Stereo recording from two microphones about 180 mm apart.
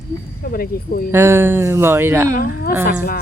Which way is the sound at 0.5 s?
55° left (ahead or behind).